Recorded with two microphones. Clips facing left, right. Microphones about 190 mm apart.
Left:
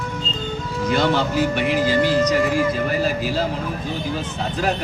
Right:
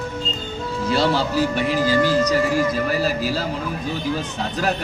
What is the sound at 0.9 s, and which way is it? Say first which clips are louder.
A man's voice: left 1 dB; 35° right (ahead or behind).